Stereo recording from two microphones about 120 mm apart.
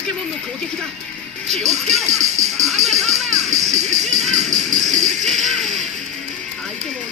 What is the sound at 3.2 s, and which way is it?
Music, 80° right.